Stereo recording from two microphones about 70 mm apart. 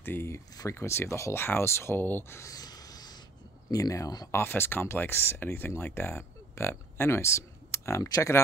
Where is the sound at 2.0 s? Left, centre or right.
Left.